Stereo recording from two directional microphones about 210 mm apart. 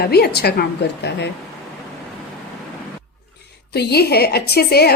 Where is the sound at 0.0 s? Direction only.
50° left (ahead or behind).